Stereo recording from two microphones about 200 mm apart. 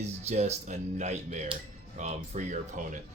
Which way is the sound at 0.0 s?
35° right (ahead or behind).